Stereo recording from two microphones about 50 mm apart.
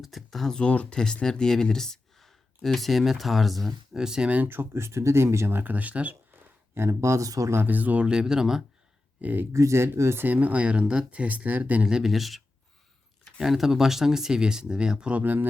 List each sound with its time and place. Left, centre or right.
0.0 s speech: centre
0.5 s speech: left; by 3.7 s centre
3.9 s speech: centre
4.4 s speech: right
5.5 s speech: right
6.7 s speech: right
7.7 s speech: right
8.0 s speech: centre
9.2 s speech: right
9.5 s speech: right
10.2 s speech: right
11.9 s speech: centre
15.2 s speech: right